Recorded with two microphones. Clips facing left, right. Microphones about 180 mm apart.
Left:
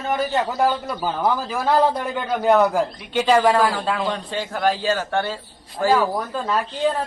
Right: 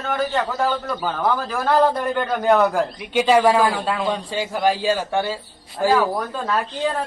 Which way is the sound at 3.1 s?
10° right (ahead or behind).